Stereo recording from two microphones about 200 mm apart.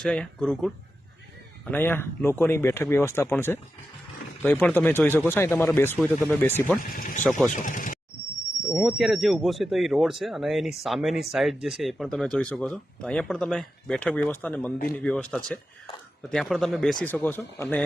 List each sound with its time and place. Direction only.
0.0 s speech: 5° left (ahead or behind)
1.7 s speech: 10° left (ahead or behind)
6.9 s speech: 40° left (ahead or behind)
7.3 s speech: centre (ahead or behind)
7.5 s speech: 40° left (ahead or behind)
8.6 s speech: centre (ahead or behind)